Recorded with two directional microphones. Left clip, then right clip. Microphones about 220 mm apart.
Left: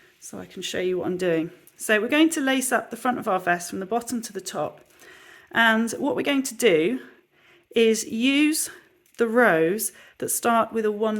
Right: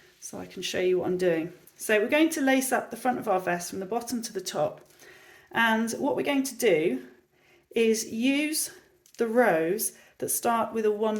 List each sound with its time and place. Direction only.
0.3 s speech: 20° left (ahead or behind)